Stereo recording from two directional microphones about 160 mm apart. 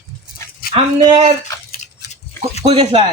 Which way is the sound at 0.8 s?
35° right (ahead or behind).